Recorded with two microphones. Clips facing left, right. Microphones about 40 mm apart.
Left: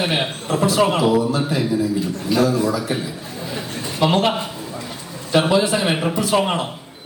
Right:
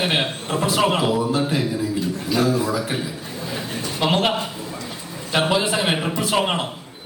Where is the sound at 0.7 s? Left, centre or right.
Right.